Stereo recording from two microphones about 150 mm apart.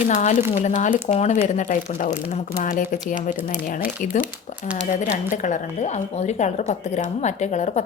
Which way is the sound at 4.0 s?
60° left (ahead or behind).